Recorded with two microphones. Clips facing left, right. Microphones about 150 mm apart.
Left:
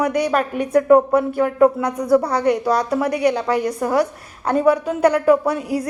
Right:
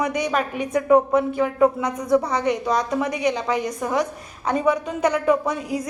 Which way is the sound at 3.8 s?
10° left (ahead or behind).